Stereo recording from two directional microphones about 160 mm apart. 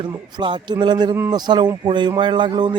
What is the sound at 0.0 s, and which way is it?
Speech, 30° right (ahead or behind).